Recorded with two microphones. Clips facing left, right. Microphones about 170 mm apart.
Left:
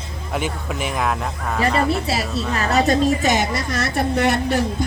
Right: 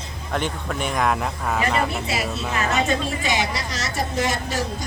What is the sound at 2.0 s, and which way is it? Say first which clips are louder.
A woman's voice: left 3 dB; 35° left (ahead or behind).